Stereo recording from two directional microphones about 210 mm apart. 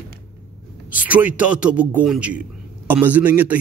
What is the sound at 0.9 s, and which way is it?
A man's voice, 5° right (ahead or behind).